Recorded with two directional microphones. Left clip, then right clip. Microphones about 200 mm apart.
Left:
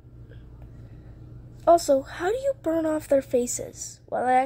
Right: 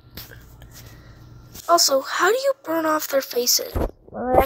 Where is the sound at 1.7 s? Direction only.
15° right (ahead or behind).